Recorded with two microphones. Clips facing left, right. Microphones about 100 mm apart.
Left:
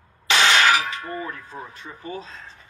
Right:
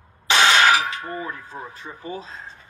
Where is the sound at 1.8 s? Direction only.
35° right (ahead or behind).